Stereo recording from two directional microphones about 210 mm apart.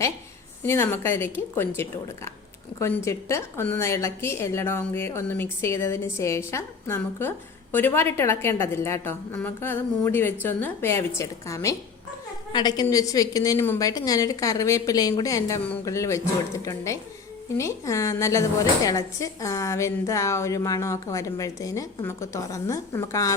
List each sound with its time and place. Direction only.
0.6 s a woman's voice: 10° left (ahead or behind)